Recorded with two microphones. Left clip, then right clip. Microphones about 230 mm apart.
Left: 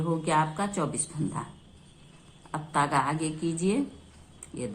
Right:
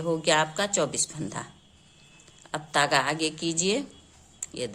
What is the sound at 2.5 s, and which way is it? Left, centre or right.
Speech, right.